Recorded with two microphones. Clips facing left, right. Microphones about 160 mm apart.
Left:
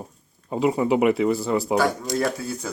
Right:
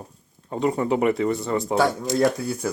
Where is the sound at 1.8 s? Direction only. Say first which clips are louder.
Right 2 dB; 25° right (ahead or behind).